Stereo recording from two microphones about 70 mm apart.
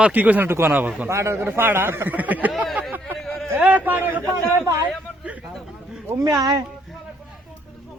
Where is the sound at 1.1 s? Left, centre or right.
Right.